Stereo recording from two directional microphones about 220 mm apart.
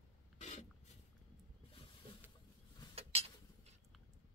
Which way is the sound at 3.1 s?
25° right (ahead or behind).